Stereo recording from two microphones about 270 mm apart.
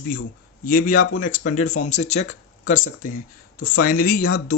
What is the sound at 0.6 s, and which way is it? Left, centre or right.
Speech, left.